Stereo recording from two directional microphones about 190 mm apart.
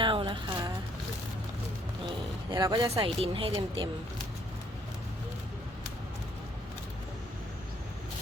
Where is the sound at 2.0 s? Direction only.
20° right (ahead or behind).